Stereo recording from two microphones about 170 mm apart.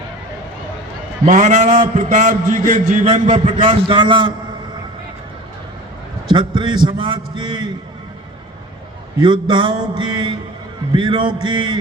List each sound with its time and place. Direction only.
1.2 s a man's voice: 45° right (ahead or behind)
3.4 s a man's voice: 30° right (ahead or behind)
6.3 s a man's voice: 25° right (ahead or behind)
9.1 s a man's voice: 25° right (ahead or behind)